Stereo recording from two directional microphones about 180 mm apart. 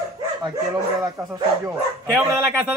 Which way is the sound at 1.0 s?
15° right (ahead or behind).